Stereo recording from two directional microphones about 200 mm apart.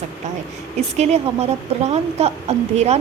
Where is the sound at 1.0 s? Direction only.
35° right (ahead or behind).